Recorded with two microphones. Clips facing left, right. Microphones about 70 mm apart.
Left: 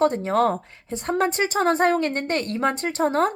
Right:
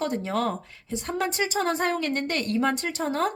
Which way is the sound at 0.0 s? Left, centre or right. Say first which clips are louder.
Left 7 dB; left.